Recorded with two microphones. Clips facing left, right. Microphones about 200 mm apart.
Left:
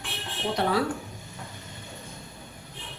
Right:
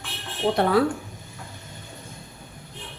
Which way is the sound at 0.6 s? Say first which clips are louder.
Right 3 dB; 55° right (ahead or behind).